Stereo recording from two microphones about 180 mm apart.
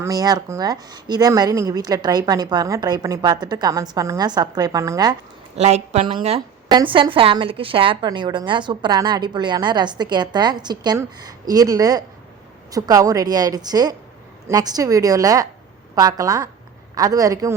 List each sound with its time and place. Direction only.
0.0 s speech: 20° right (ahead or behind)
5.5 s a woman's voice: 40° right (ahead or behind); by 17.5 s 20° right (ahead or behind)